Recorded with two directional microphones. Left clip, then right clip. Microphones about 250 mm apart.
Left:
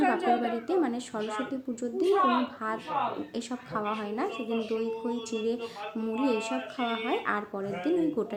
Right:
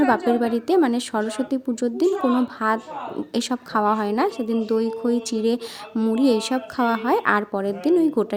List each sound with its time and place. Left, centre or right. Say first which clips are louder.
0.0 s speech: right 6 dB; right